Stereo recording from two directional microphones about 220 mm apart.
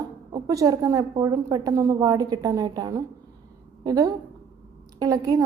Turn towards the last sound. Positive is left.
turn(degrees=-15)  # may be behind; listen again after turning